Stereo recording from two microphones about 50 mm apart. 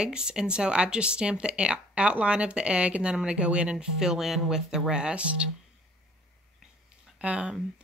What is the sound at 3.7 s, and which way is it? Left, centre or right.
Speech, centre.